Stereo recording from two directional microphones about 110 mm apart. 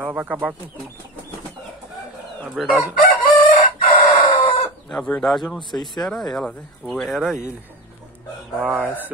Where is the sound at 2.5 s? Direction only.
Centre (ahead or behind).